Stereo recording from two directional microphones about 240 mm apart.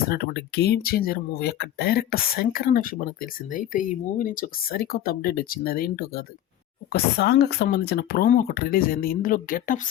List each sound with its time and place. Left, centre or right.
0.1 s speech: left